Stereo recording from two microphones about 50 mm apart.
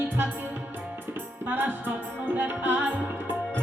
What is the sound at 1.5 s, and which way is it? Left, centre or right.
Music, right.